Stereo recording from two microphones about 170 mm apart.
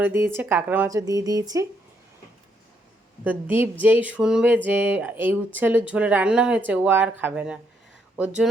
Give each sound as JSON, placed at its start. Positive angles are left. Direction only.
{"t": 0.0, "sound": "speech", "side_deg": -15}
{"t": 3.2, "sound": "speech", "side_deg": -10}